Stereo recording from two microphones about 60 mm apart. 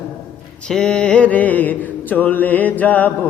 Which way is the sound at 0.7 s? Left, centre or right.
Centre.